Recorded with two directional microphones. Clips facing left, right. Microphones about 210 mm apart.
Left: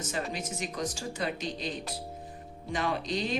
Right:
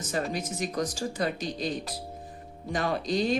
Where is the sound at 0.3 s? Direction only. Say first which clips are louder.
Right 5 dB; 35° right (ahead or behind).